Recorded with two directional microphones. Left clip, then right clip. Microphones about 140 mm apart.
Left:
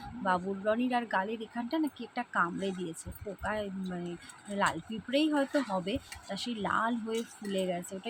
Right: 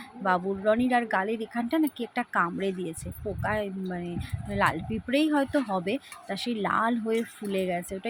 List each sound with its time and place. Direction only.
0.2 s speech: 25° right (ahead or behind)